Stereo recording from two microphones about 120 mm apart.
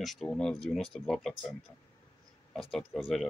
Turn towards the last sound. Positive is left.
turn(degrees=0)  # may be behind; listen again after turning